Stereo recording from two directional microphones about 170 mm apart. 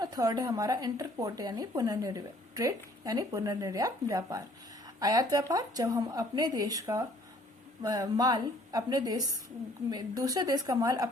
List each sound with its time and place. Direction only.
0.0 s speech: 20° right (ahead or behind)